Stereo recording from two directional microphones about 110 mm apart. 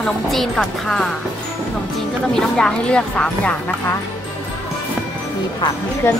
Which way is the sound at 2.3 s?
5° left (ahead or behind).